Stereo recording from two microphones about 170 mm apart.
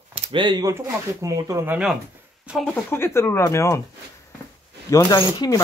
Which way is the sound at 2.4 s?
Centre (ahead or behind).